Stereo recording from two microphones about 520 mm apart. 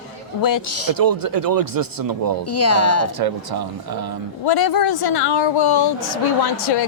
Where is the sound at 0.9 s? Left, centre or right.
Right.